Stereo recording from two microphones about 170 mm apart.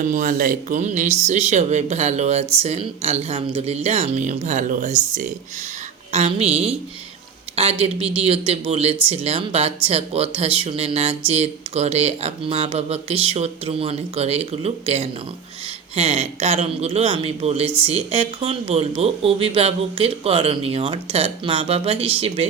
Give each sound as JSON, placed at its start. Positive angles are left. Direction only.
{"t": 0.0, "sound": "speech", "side_deg": -50}
{"t": 6.1, "sound": "speech", "side_deg": -35}